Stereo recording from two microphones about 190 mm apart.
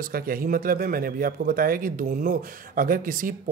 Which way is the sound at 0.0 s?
50° right (ahead or behind).